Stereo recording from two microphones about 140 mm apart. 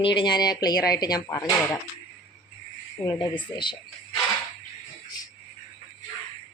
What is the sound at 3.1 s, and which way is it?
Speech, 30° left (ahead or behind).